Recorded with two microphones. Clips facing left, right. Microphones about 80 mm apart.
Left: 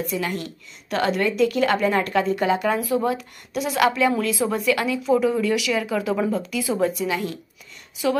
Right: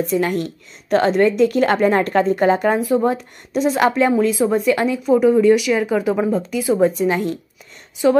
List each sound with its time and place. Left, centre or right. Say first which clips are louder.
0.1 s speech: right 7 dB; right
4.1 s speech: right 6 dB; right
5.0 s speech: right 8 dB; centre
7.0 s speech: right 6 dB; right